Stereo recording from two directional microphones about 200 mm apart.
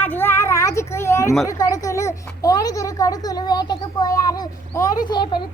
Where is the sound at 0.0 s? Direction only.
10° left (ahead or behind).